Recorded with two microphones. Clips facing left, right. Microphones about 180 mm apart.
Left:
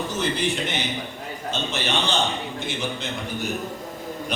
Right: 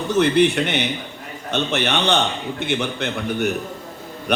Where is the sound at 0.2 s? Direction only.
65° right (ahead or behind).